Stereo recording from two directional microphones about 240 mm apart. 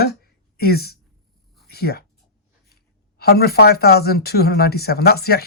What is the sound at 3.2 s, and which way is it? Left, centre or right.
Speech, left.